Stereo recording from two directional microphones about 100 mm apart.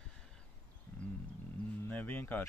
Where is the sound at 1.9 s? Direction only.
20° left (ahead or behind).